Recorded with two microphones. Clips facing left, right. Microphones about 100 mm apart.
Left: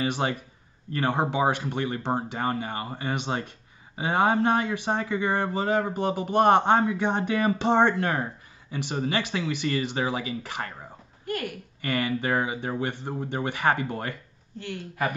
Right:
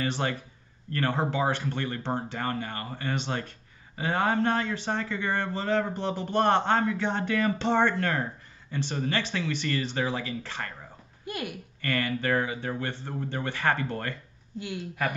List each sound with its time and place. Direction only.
0.0 s a man's voice: 15° left (ahead or behind)
11.2 s speech: 15° right (ahead or behind)
11.8 s a man's voice: 15° left (ahead or behind)